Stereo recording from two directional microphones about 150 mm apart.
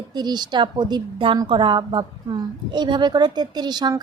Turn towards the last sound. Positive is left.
turn(degrees=-30)  # may be behind; listen again after turning